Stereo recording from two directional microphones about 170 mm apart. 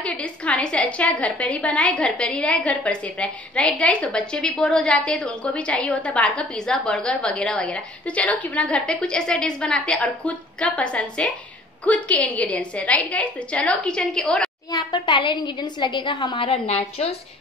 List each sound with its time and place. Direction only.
0.0 s a woman's voice: 5° left (ahead or behind)
14.7 s a woman's voice: 25° left (ahead or behind)
16.3 s a woman's voice: 35° left (ahead or behind)